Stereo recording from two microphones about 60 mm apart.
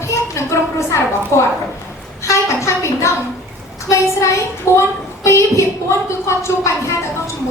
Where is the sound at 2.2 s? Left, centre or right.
Left.